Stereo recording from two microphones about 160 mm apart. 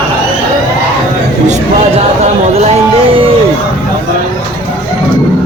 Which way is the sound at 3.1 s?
35° right (ahead or behind).